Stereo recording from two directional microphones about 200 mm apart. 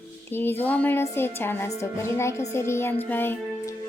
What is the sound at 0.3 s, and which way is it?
A woman's voice, 10° left (ahead or behind).